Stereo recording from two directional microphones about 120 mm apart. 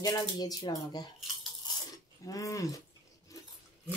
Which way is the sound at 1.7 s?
35° left (ahead or behind).